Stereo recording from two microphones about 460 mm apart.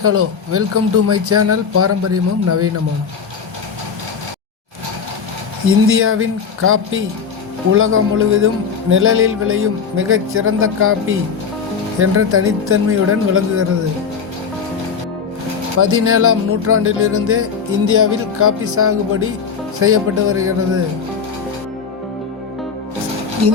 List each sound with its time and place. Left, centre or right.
0.0 s speech: right
5.6 s speech: right
15.8 s speech: right
23.4 s speech: right